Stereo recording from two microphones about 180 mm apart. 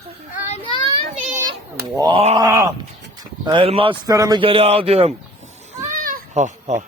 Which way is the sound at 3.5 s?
30° right (ahead or behind).